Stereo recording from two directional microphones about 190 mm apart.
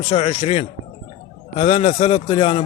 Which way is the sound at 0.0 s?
35° left (ahead or behind).